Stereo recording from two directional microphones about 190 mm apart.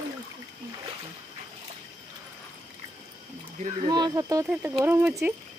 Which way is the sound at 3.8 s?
20° right (ahead or behind).